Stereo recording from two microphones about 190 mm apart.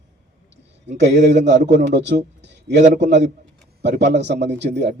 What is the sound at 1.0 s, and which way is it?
A man's voice, 65° right (ahead or behind).